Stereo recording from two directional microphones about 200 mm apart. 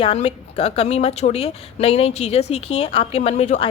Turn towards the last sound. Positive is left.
turn(degrees=35)  # may be behind; listen again after turning